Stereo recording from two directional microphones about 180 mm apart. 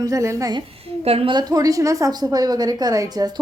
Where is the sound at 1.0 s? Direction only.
30° right (ahead or behind).